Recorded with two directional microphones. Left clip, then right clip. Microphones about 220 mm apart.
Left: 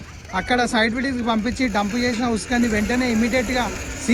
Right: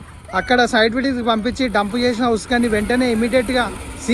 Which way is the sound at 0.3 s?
15° left (ahead or behind).